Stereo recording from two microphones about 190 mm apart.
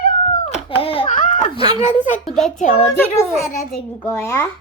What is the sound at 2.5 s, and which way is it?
Speech, 35° left (ahead or behind).